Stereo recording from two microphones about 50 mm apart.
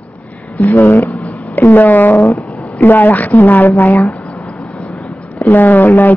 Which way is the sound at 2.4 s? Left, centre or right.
Centre.